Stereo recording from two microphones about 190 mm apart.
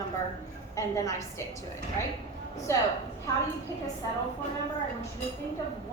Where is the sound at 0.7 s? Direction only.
15° left (ahead or behind).